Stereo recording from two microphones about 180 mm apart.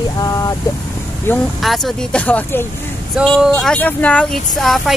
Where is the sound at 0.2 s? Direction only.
20° left (ahead or behind).